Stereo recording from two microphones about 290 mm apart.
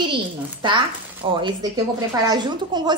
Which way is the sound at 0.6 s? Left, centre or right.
Centre.